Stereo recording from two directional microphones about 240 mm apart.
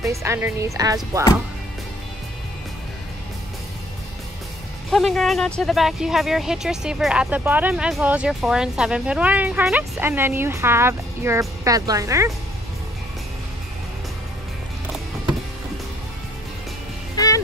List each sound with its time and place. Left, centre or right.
0.1 s speech: centre
4.9 s speech: centre